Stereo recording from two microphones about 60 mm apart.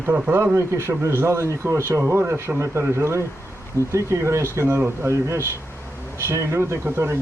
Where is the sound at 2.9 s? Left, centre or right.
Right.